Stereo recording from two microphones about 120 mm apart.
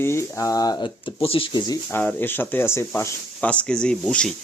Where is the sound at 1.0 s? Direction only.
50° left (ahead or behind).